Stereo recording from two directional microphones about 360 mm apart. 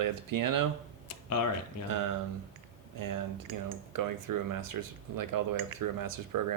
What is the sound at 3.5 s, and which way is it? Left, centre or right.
Speech, right.